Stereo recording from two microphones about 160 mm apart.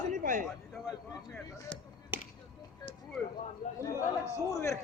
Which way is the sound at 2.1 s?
10° right (ahead or behind).